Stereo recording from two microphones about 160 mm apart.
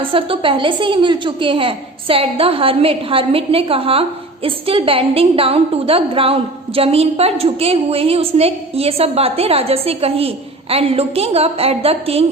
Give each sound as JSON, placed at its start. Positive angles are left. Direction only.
{"t": 0.0, "sound": "a woman's voice", "side_deg": -35}